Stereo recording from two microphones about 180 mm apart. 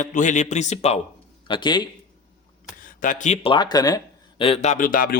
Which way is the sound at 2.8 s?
45° left (ahead or behind).